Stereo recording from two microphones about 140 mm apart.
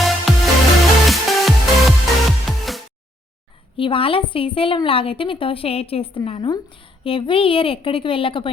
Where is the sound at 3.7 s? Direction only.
40° left (ahead or behind).